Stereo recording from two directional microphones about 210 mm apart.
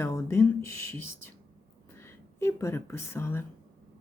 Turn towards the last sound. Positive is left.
turn(degrees=10)  # may be behind; listen again after turning